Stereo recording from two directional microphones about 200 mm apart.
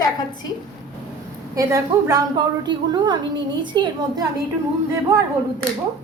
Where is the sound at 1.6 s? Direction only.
15° right (ahead or behind).